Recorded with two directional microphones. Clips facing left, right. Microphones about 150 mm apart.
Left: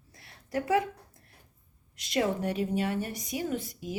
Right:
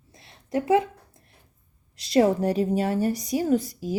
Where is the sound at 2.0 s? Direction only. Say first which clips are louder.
Right 8 dB; 35° right (ahead or behind).